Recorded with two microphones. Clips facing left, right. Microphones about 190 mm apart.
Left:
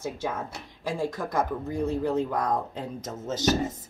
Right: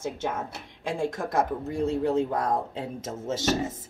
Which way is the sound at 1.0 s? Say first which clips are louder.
Right 2 dB; 25° right (ahead or behind).